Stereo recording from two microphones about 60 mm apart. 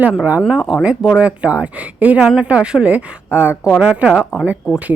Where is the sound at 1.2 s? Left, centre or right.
Right.